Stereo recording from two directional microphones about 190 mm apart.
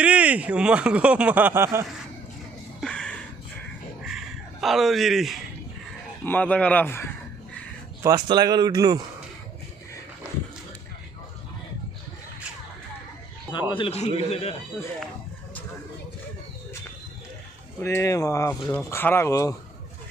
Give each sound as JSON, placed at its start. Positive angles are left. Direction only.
{"t": 0.0, "sound": "speech", "side_deg": -5}
{"t": 2.8, "sound": "a sound", "side_deg": 5}
{"t": 4.6, "sound": "speech", "side_deg": 0}
{"t": 8.0, "sound": "speech", "side_deg": -20}
{"t": 13.5, "sound": "a man's voice", "side_deg": 25}
{"t": 17.7, "sound": "speech", "side_deg": 15}